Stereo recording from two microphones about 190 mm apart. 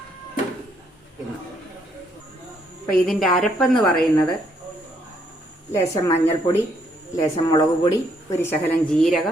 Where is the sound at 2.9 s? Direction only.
Centre (ahead or behind).